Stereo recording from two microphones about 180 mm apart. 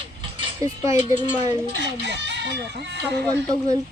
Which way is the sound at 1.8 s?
75° right (ahead or behind).